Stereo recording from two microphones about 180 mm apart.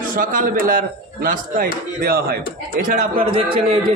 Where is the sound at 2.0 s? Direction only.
55° right (ahead or behind).